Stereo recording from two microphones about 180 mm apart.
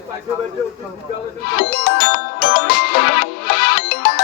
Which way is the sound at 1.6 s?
55° left (ahead or behind).